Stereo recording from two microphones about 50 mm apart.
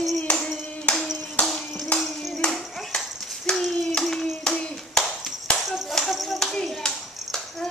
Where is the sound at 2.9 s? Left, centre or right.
Centre.